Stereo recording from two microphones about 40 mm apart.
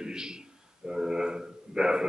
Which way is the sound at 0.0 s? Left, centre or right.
Centre.